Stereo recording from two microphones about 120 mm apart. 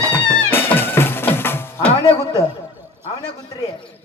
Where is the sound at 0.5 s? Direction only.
15° left (ahead or behind).